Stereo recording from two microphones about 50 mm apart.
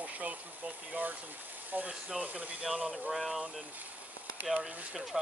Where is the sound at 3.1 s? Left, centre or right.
Centre.